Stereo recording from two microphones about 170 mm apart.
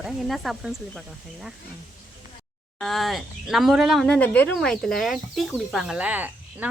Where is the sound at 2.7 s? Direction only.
Centre (ahead or behind).